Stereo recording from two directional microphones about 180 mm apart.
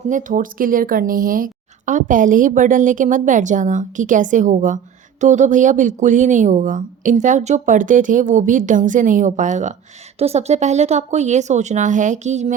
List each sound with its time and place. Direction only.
0.1 s speech: 45° right (ahead or behind)